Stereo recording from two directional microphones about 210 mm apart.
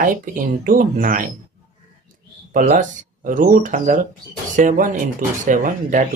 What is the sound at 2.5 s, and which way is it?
Speech, 40° right (ahead or behind).